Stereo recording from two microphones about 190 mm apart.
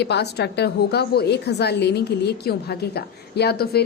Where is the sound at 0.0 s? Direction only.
60° left (ahead or behind).